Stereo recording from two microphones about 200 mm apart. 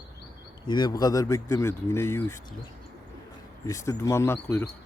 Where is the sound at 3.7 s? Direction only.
15° left (ahead or behind).